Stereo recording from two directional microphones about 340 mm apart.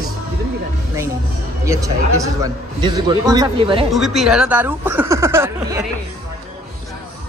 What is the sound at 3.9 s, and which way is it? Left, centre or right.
Speech, centre.